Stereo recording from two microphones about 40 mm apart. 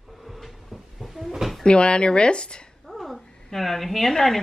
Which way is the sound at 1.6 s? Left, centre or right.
Left.